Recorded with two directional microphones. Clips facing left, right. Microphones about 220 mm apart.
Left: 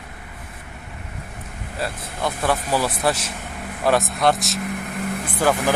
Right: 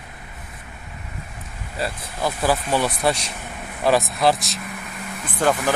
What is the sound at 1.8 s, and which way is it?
Speech, centre (ahead or behind).